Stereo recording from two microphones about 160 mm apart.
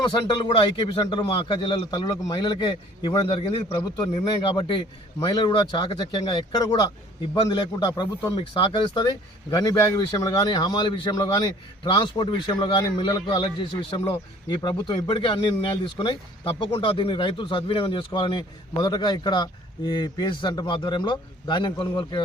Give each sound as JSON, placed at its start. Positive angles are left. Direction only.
{"t": 0.0, "sound": "speech", "side_deg": 30}